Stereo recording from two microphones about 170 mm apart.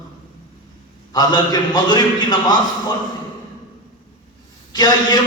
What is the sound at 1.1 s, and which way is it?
Speech, 25° left (ahead or behind).